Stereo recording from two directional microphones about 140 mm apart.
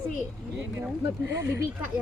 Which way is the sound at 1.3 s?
20° right (ahead or behind).